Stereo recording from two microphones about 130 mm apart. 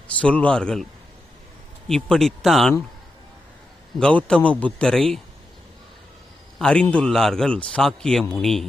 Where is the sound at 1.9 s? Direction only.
5° left (ahead or behind).